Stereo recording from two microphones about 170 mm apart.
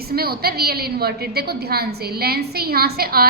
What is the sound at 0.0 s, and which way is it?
A woman's voice, 65° right (ahead or behind).